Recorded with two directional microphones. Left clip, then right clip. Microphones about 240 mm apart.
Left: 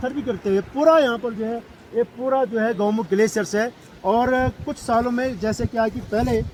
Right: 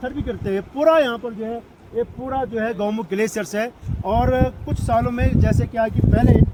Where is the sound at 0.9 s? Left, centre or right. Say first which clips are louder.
Even; right.